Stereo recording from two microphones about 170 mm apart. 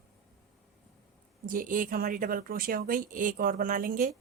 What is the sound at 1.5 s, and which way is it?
Speech, 50° right (ahead or behind).